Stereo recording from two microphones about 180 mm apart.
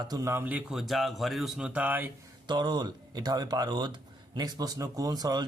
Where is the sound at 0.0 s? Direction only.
20° right (ahead or behind).